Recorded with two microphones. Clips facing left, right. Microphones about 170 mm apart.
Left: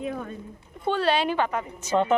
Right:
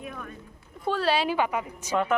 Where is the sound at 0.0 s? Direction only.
25° left (ahead or behind).